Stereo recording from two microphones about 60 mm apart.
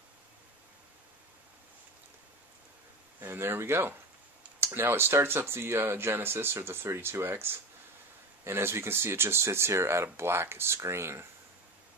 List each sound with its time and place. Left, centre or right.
3.2 s speech: right